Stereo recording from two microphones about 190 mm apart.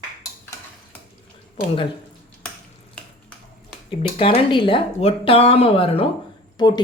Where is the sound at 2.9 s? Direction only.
5° left (ahead or behind).